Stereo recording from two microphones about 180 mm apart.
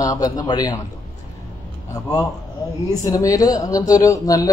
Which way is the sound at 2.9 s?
20° left (ahead or behind).